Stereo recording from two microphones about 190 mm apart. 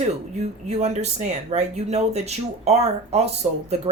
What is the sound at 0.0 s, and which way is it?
Speech, 35° right (ahead or behind).